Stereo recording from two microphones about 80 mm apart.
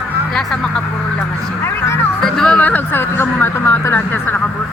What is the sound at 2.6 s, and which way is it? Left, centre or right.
A woman's voice, left.